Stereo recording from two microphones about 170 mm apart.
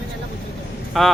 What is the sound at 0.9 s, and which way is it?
Speech, centre (ahead or behind).